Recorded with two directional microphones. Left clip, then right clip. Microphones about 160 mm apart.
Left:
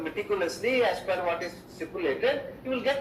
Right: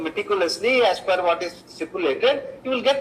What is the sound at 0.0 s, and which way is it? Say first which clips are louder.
A man's voice: right 7 dB; 20° right (ahead or behind).